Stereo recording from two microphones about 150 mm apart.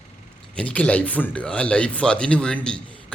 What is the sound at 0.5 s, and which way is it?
Speech, 10° left (ahead or behind).